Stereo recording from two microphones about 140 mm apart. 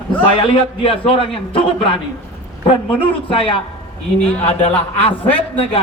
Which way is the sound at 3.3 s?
40° left (ahead or behind).